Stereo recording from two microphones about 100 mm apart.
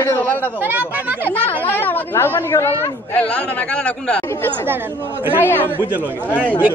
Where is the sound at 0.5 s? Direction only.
20° right (ahead or behind).